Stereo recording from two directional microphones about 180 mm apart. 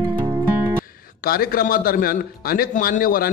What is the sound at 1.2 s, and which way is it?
A man's voice, 55° left (ahead or behind).